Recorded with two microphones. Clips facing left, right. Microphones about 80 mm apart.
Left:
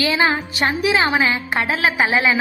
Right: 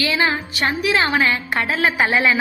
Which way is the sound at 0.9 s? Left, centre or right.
Centre.